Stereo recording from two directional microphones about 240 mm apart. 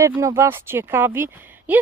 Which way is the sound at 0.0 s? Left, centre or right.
Centre.